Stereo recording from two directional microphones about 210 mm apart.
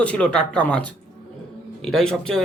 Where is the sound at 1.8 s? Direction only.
Centre (ahead or behind).